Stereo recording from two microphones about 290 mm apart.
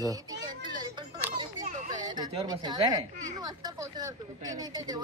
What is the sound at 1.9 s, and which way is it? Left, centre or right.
Speech, centre.